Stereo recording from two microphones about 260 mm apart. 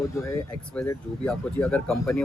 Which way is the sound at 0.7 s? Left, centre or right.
Centre.